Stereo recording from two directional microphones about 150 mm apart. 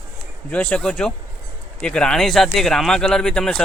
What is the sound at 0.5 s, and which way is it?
Speech, 10° left (ahead or behind).